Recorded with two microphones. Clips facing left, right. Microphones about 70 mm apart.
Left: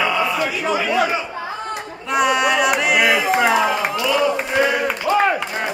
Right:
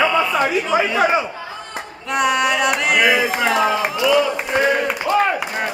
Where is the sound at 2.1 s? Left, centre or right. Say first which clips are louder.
Left 1 dB; centre.